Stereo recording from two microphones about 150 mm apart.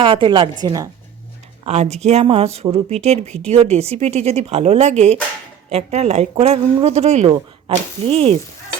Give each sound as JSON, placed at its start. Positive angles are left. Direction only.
{"t": 0.0, "sound": "a woman's voice", "side_deg": -35}
{"t": 1.6, "sound": "speech", "side_deg": -45}